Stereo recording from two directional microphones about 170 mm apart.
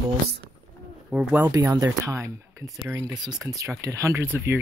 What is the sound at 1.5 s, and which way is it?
Speech, 20° right (ahead or behind).